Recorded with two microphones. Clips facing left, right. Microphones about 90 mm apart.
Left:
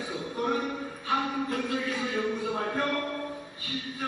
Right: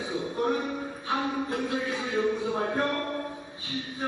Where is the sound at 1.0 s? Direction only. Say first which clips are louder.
Left 1 dB; 25° right (ahead or behind).